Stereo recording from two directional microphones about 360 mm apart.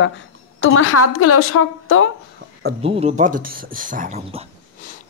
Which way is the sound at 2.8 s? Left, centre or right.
Centre.